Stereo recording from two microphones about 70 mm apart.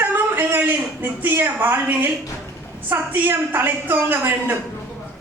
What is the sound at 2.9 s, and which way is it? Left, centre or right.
A woman's voice, right.